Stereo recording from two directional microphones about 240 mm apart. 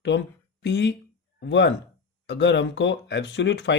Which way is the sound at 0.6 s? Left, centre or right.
Left.